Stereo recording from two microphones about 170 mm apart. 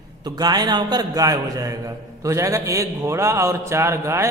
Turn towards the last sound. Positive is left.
turn(degrees=-15)  # may be behind; listen again after turning